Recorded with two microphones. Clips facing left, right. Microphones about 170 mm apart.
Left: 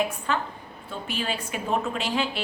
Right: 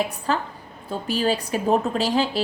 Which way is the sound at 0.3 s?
35° right (ahead or behind).